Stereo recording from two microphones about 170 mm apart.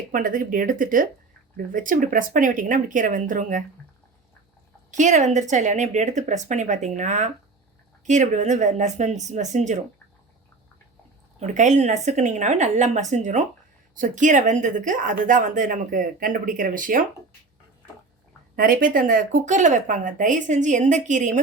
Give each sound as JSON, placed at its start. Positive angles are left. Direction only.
{"t": 0.1, "sound": "speech", "side_deg": -50}
{"t": 4.9, "sound": "speech", "side_deg": -45}
{"t": 11.3, "sound": "speech", "side_deg": -45}
{"t": 18.5, "sound": "speech", "side_deg": -55}